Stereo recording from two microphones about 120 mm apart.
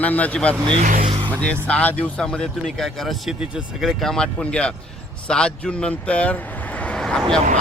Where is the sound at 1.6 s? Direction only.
10° left (ahead or behind).